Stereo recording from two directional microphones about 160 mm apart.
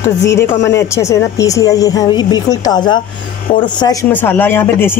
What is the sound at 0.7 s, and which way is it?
A woman's voice, 20° left (ahead or behind).